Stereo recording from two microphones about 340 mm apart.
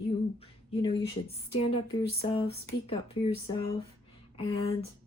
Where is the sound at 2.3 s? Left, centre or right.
Centre.